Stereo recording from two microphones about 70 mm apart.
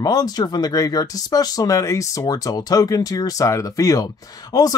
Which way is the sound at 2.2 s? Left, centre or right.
Left.